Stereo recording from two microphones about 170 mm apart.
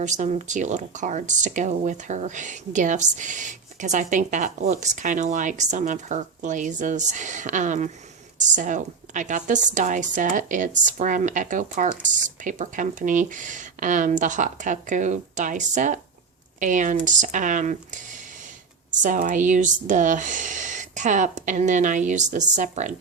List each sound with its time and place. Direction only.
0.0 s speech: 45° right (ahead or behind)